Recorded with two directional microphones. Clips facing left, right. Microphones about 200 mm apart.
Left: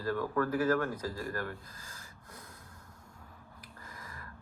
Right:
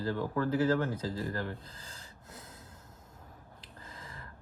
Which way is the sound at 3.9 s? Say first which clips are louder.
Right 1 dB; 25° right (ahead or behind).